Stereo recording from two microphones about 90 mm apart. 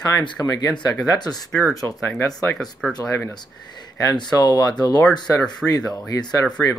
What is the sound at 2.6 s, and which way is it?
Speech, 5° left (ahead or behind).